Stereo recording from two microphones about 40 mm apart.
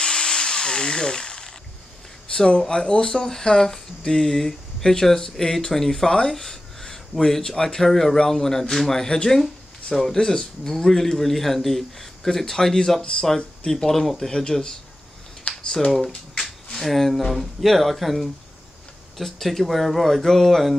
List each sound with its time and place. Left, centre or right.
0.0 s drill: left
2.3 s speech: left
14.3 s speech: left
15.5 s computer keyboard: left
16.7 s speech: centre